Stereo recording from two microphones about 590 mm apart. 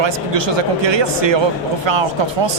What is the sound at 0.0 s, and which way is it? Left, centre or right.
Speech, right.